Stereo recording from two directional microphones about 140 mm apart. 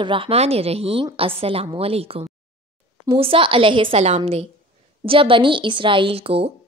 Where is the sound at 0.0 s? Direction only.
40° right (ahead or behind).